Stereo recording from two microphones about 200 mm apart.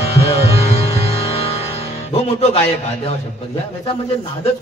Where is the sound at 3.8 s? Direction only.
30° left (ahead or behind).